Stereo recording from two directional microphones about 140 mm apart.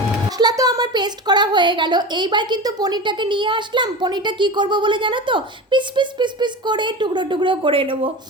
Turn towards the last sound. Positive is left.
turn(degrees=-40)  # may be behind; listen again after turning